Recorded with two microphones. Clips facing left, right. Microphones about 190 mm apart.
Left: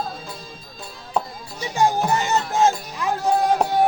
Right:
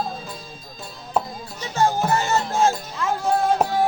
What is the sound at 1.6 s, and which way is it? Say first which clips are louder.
Music: left 1 dB; 15° left (ahead or behind).